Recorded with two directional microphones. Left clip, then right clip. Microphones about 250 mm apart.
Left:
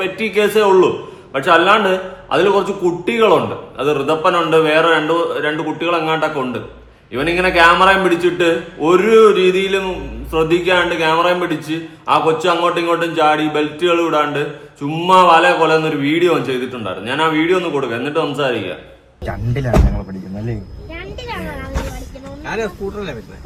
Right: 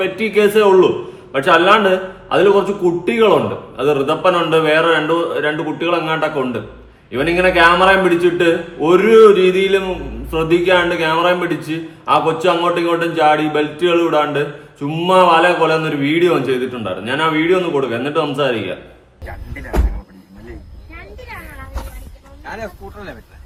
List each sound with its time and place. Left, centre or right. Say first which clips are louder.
0.0 s a man's voice: right 2 dB; centre